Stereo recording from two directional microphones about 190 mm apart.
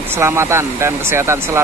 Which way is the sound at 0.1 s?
15° right (ahead or behind).